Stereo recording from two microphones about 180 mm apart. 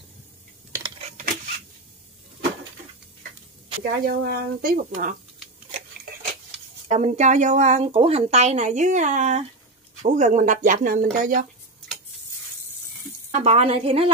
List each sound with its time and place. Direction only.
1.0 s a sound: 45° right (ahead or behind)
3.8 s speech: 55° right (ahead or behind)
6.9 s speech: 40° right (ahead or behind)
13.3 s speech: 35° right (ahead or behind)